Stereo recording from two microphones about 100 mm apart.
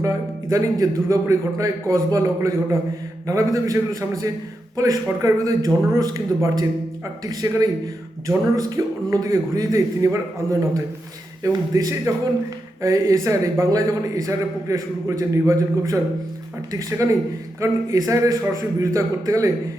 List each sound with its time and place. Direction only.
0.5 s a man's voice: 30° right (ahead or behind)
17.0 s a man's voice: 30° right (ahead or behind)